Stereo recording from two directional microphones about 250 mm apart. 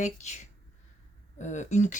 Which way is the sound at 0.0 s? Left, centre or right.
Left.